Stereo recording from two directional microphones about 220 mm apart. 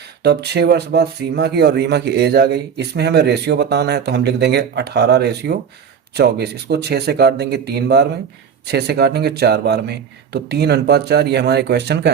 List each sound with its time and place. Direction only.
0.2 s speech: 50° right (ahead or behind)